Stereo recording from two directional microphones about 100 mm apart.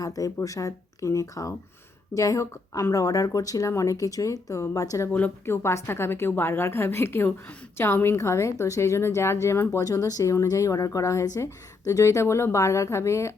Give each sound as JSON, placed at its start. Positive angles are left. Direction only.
{"t": 0.0, "sound": "speech", "side_deg": 35}
{"t": 5.1, "sound": "a woman's voice", "side_deg": 20}